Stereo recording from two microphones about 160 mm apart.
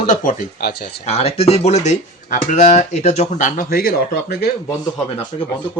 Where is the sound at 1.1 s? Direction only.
40° left (ahead or behind); by 4.4 s 70° left (ahead or behind).